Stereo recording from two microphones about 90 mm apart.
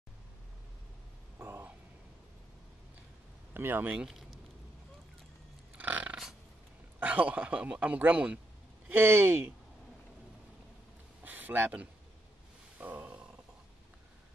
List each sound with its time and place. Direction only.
1.4 s a sound: 20° right (ahead or behind)
3.5 s speech: 25° right (ahead or behind)
3.9 s speech: 5° right (ahead or behind)
5.8 s a sound: 20° right (ahead or behind)
7.0 s a man's voice: 20° right (ahead or behind)
11.2 s speech: 20° right (ahead or behind)
12.7 s grunt: 15° right (ahead or behind)